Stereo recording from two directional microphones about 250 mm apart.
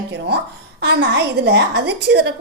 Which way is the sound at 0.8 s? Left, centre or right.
Right.